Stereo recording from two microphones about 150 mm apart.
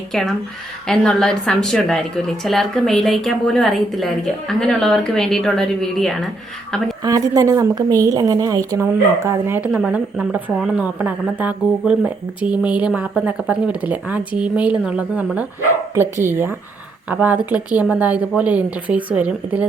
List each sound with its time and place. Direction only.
0.1 s a woman's voice: centre (ahead or behind)
7.0 s a woman's voice: 25° right (ahead or behind)
9.7 s speech: 5° right (ahead or behind)